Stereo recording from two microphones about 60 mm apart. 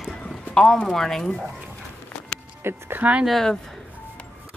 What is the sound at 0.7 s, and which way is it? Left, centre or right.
Speech, centre.